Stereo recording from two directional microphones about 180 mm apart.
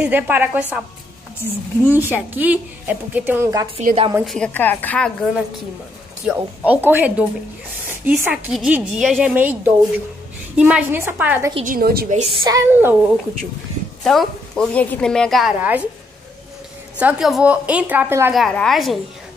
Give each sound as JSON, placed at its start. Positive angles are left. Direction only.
{"t": 0.0, "sound": "a woman's voice", "side_deg": -10}
{"t": 4.2, "sound": "a woman's voice", "side_deg": 5}
{"t": 6.2, "sound": "a woman's voice", "side_deg": -10}
{"t": 11.6, "sound": "a woman's voice", "side_deg": -55}
{"t": 12.4, "sound": "a woman's voice", "side_deg": -15}
{"t": 14.0, "sound": "a woman's voice", "side_deg": 0}
{"t": 17.0, "sound": "a woman's voice", "side_deg": -5}
{"t": 18.3, "sound": "a woman's voice", "side_deg": 0}